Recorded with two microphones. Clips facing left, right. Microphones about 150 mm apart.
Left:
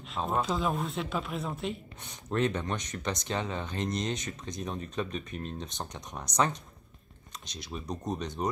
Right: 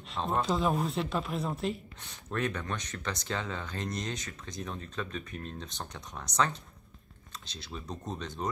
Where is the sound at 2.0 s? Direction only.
20° left (ahead or behind).